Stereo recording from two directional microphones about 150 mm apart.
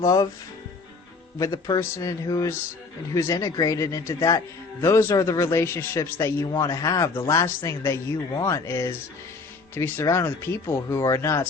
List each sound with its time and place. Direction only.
0.0 s a man's voice: 25° left (ahead or behind)
1.4 s a man's voice: 25° left (ahead or behind)